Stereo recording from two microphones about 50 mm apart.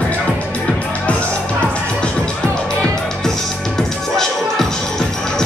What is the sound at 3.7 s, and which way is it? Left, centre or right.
Music, centre.